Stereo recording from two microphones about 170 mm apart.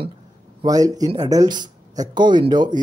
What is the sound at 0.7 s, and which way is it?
Speech, 20° right (ahead or behind).